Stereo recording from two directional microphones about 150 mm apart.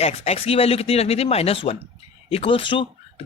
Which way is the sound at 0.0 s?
45° left (ahead or behind).